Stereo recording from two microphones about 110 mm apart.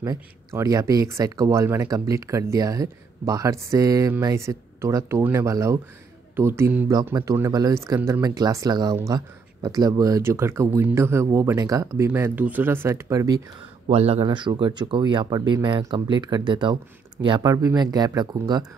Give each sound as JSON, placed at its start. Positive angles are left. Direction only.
{"t": 0.0, "sound": "speech", "side_deg": -25}
{"t": 7.1, "sound": "speech", "side_deg": -35}
{"t": 13.8, "sound": "a man's voice", "side_deg": -70}
{"t": 14.2, "sound": "speech", "side_deg": -40}
{"t": 17.4, "sound": "speech", "side_deg": -30}